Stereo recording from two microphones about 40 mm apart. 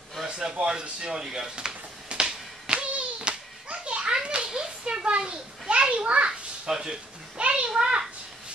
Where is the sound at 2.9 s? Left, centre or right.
Right.